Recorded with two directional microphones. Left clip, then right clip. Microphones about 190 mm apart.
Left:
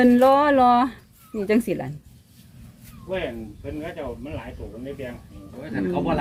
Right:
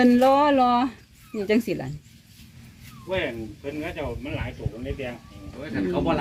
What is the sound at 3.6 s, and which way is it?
Speech, 20° right (ahead or behind).